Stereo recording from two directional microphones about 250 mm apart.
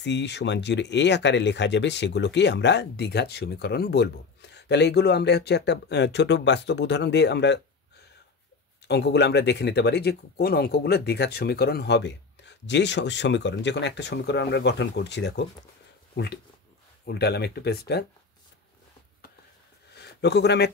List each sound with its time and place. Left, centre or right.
0.0 s speech: left
17.0 s speech: left
19.9 s a sound: left